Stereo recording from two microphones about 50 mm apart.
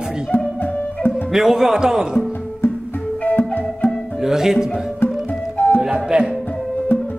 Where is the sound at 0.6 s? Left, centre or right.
Left.